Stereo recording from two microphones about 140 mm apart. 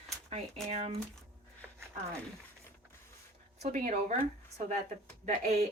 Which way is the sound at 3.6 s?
60° right (ahead or behind).